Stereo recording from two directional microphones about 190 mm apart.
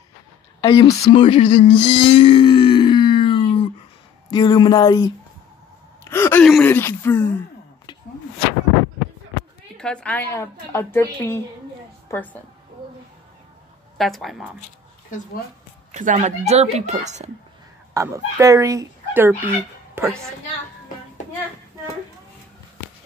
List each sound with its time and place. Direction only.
0.6 s a sound: 25° left (ahead or behind)
4.3 s speech: 20° left (ahead or behind)
6.0 s gasp: 15° left (ahead or behind)
6.4 s speech: 5° left (ahead or behind)
9.8 s a woman's voice: 5° left (ahead or behind)
13.9 s a woman's voice: centre (ahead or behind)
15.9 s speech: 40° right (ahead or behind)
17.9 s a woman's voice: 15° right (ahead or behind)